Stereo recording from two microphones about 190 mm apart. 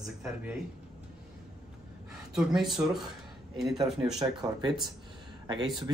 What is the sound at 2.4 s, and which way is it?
Speech, centre (ahead or behind).